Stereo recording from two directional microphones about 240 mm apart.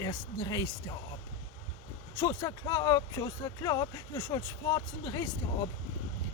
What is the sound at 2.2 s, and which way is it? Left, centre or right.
Speech, centre.